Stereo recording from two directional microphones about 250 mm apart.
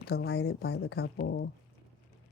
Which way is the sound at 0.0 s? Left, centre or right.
Left.